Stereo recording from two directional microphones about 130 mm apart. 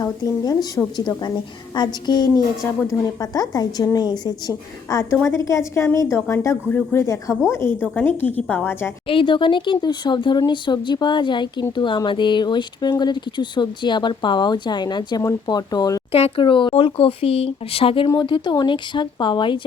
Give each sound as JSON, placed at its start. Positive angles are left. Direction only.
{"t": 0.0, "sound": "a woman's voice", "side_deg": 30}
{"t": 9.0, "sound": "speech", "side_deg": 40}
{"t": 16.1, "sound": "speech", "side_deg": 45}